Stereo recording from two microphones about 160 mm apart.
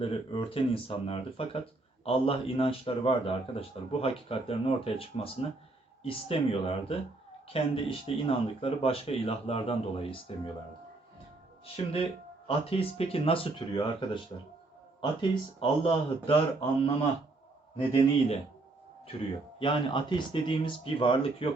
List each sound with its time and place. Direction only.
0.0 s speech: 35° left (ahead or behind)
11.6 s speech: 35° left (ahead or behind)
17.7 s speech: 35° left (ahead or behind)
19.5 s speech: 30° left (ahead or behind)